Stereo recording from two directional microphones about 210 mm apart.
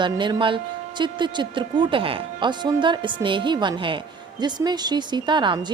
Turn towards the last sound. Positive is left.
turn(degrees=-20)  # may be behind; listen again after turning